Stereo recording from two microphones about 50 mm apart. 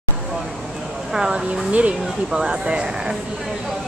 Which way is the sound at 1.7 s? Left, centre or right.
Right.